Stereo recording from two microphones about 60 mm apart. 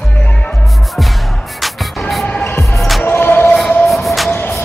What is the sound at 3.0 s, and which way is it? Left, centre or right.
Music, left.